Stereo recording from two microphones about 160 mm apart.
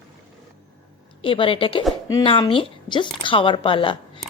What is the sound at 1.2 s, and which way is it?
A woman's voice, 35° left (ahead or behind).